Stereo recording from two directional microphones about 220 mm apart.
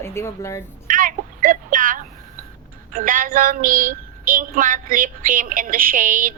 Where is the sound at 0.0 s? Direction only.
10° left (ahead or behind).